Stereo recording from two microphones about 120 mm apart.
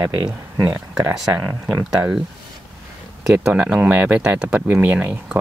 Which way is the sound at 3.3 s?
10° right (ahead or behind).